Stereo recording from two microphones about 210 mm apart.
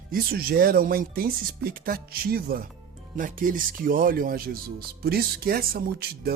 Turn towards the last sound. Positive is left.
turn(degrees=-45)  # may be behind; listen again after turning